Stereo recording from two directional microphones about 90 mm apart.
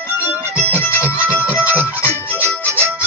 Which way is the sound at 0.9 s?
20° right (ahead or behind).